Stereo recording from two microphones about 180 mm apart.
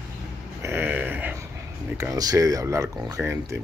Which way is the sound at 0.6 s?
15° right (ahead or behind).